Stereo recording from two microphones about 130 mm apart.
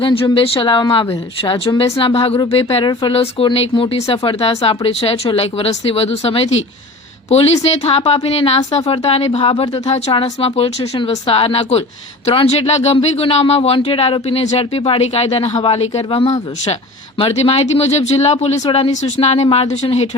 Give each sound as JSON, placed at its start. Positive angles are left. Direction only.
{"t": 0.0, "sound": "speech", "side_deg": 45}